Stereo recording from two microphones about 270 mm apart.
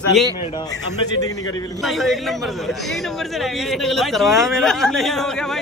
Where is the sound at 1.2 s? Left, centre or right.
Centre.